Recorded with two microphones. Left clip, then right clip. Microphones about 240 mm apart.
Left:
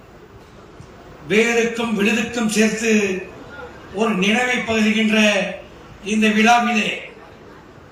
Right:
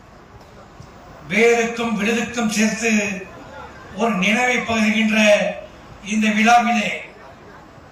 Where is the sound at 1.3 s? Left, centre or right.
Left.